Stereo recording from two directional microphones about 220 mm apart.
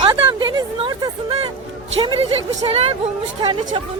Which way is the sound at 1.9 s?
25° right (ahead or behind).